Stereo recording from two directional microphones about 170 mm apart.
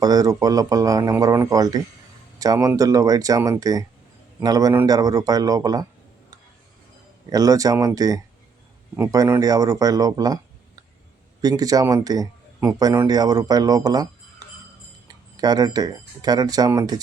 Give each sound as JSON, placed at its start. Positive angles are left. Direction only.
{"t": 0.0, "sound": "speech", "side_deg": -20}
{"t": 7.3, "sound": "speech", "side_deg": -20}
{"t": 11.4, "sound": "speech", "side_deg": -20}